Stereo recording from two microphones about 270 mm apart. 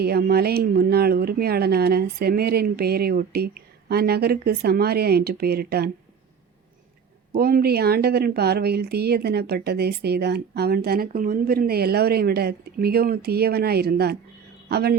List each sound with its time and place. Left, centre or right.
0.0 s speech: right
7.3 s a man's voice: right